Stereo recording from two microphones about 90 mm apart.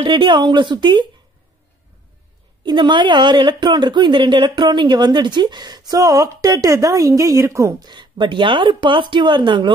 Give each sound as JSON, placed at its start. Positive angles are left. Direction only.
{"t": 0.0, "sound": "speech", "side_deg": -60}
{"t": 2.6, "sound": "speech", "side_deg": -60}
{"t": 7.8, "sound": "speech", "side_deg": -55}